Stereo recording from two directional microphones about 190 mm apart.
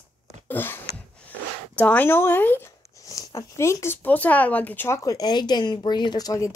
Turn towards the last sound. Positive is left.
turn(degrees=20)  # may be behind; listen again after turning